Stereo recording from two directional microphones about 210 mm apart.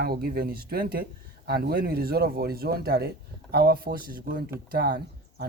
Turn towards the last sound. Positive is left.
turn(degrees=-45)  # may be behind; listen again after turning